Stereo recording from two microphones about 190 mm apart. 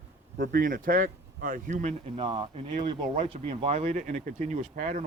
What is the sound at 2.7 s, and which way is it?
Speech, 40° right (ahead or behind).